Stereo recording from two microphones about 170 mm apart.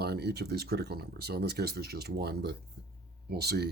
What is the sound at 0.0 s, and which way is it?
Speech, 70° right (ahead or behind).